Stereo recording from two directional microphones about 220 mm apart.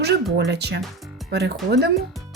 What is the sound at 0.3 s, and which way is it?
Speech, 50° right (ahead or behind).